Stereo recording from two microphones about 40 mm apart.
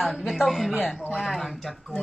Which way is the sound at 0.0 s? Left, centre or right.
Centre.